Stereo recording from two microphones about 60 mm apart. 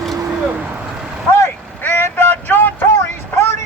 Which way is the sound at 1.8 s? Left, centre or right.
Left.